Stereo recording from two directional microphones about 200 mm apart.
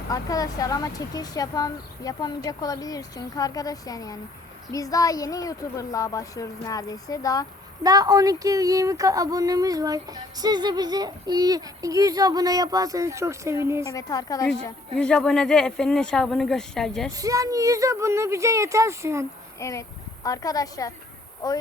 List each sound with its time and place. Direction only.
0.1 s speech: 15° left (ahead or behind)
7.9 s speech: 20° right (ahead or behind)
13.9 s a woman's voice: 20° left (ahead or behind)
14.9 s speech: 5° left (ahead or behind)
17.1 s speech: 15° right (ahead or behind)
19.5 s a woman's voice: 15° left (ahead or behind)